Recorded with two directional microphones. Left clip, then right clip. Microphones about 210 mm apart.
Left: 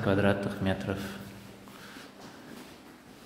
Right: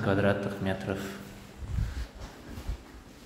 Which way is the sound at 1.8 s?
15° left (ahead or behind).